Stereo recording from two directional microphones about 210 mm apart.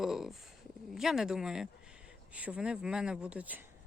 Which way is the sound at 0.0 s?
Centre (ahead or behind).